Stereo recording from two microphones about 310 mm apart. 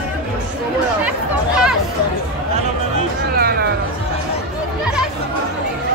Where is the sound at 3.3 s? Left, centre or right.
Right.